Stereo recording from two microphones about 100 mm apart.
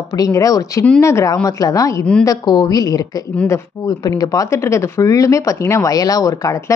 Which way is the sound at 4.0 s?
40° left (ahead or behind).